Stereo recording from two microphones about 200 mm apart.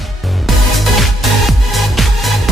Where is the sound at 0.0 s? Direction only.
Centre (ahead or behind).